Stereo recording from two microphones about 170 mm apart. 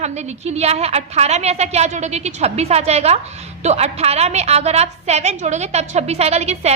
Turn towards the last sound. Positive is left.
turn(degrees=-40)  # may be behind; listen again after turning